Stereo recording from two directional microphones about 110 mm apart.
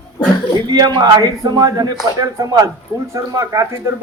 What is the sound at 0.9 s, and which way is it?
Speech, 35° right (ahead or behind).